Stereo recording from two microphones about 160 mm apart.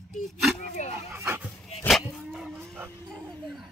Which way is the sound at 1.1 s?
15° right (ahead or behind).